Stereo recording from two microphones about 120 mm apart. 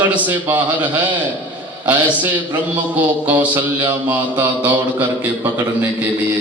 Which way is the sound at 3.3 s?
15° right (ahead or behind).